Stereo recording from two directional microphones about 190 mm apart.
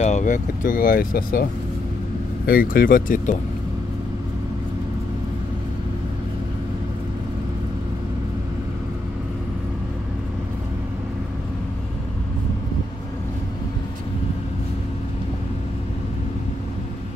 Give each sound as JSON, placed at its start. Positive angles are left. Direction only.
{"t": 0.0, "sound": "speech", "side_deg": 40}